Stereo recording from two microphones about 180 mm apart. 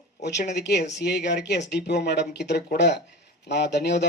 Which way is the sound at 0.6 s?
70° left (ahead or behind).